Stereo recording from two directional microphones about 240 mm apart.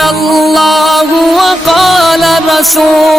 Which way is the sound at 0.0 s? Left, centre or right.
Centre.